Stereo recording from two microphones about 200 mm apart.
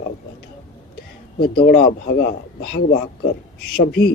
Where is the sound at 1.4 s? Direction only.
50° left (ahead or behind).